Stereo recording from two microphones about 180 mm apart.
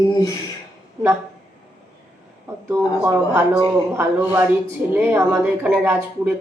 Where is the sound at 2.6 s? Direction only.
10° right (ahead or behind).